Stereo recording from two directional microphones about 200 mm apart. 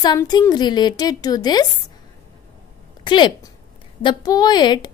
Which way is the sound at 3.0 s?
20° left (ahead or behind).